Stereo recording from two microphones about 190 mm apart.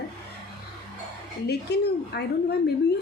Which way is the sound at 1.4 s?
60° left (ahead or behind).